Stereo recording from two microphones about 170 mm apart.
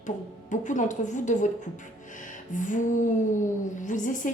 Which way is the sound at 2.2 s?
50° left (ahead or behind).